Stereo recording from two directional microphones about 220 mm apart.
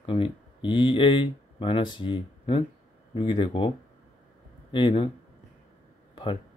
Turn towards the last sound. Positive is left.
turn(degrees=25)  # may be behind; listen again after turning